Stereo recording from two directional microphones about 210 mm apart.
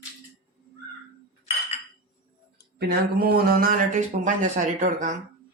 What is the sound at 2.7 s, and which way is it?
Speech, 50° right (ahead or behind).